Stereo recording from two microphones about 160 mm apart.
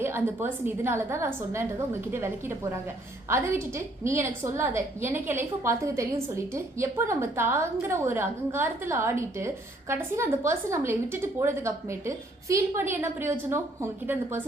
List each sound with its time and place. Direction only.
0.0 s a woman's voice: 15° right (ahead or behind)